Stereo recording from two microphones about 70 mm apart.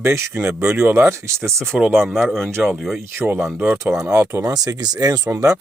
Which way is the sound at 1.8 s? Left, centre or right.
Right.